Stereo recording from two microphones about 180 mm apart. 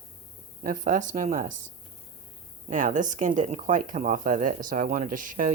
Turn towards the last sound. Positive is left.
turn(degrees=-50)  # may be behind; listen again after turning